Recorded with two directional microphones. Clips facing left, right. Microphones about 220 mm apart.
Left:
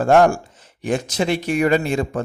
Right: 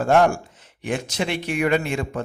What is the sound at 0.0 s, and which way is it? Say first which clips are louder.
A man's voice: left 3 dB; 45° left (ahead or behind).